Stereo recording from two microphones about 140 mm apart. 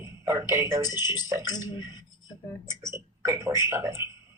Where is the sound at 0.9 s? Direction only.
30° left (ahead or behind).